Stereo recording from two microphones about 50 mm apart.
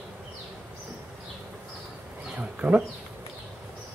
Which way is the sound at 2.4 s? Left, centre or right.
Right.